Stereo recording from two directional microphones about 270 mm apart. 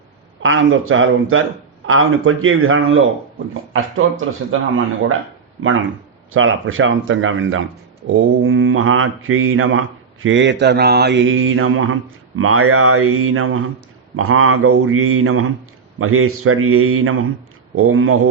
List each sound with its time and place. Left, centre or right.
0.4 s mantra: right
5.5 s speech: right
6.3 s mantra: right